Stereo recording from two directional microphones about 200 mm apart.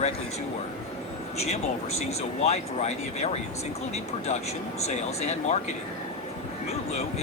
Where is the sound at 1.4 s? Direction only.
30° left (ahead or behind).